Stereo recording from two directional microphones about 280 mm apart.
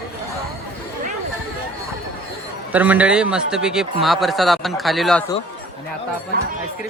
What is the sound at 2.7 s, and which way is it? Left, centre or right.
Speech, centre.